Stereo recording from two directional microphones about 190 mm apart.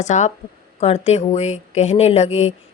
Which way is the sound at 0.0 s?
40° left (ahead or behind).